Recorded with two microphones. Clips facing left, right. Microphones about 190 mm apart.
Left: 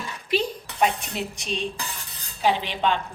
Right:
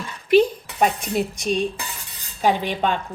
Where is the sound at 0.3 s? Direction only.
50° right (ahead or behind).